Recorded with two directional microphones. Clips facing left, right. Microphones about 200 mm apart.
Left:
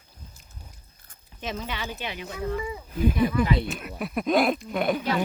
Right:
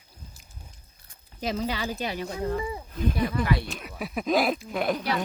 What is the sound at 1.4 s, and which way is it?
Speech, 35° right (ahead or behind).